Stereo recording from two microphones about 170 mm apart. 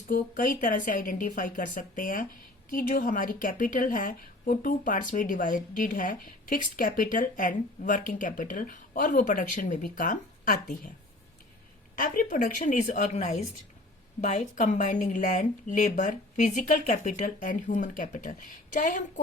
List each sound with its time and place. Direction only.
0.1 s a woman's voice: 55° left (ahead or behind)
11.9 s a woman's voice: 55° left (ahead or behind)